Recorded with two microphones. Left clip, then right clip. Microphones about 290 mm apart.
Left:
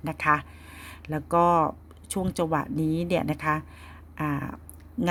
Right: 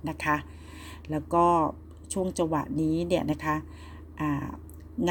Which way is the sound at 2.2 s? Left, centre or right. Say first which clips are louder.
Left 1 dB; left.